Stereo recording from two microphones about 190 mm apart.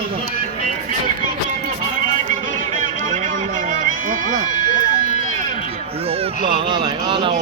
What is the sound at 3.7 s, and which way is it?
Run, 45° right (ahead or behind).